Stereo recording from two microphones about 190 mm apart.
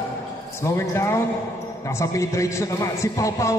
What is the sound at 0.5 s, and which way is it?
A man's voice, 15° left (ahead or behind).